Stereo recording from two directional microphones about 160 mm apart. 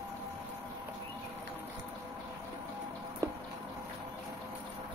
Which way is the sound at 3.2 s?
20° right (ahead or behind).